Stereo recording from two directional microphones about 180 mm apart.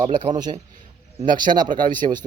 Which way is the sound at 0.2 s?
25° right (ahead or behind).